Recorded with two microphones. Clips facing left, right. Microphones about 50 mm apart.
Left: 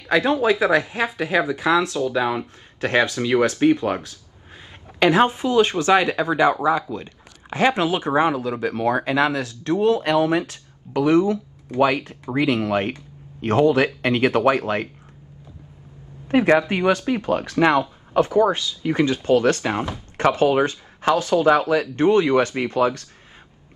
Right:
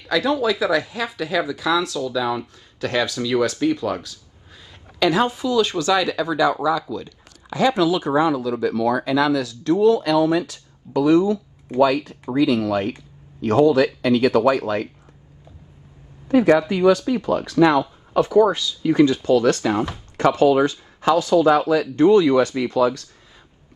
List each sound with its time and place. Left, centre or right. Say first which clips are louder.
0.1 s speech: left 2 dB; left
16.3 s speech: right 1 dB; left